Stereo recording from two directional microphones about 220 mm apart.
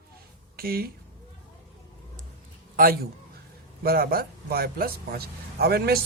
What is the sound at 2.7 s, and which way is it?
A man's voice, 40° right (ahead or behind).